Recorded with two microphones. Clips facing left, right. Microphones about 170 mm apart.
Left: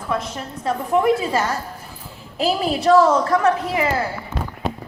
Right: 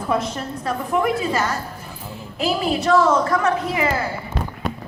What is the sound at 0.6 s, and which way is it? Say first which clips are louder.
A woman's voice: left 3 dB; 30° left (ahead or behind).